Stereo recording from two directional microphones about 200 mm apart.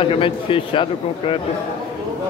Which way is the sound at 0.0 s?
25° left (ahead or behind).